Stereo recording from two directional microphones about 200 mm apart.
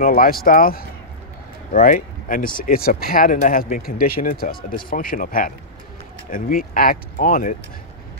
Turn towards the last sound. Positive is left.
turn(degrees=45)  # may be behind; listen again after turning